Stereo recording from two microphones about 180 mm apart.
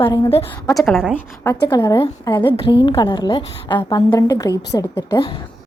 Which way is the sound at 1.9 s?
30° left (ahead or behind).